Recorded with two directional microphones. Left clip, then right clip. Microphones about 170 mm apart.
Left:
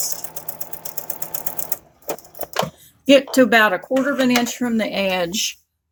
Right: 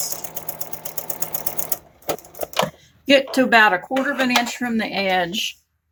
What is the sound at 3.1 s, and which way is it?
Speech, 60° left (ahead or behind).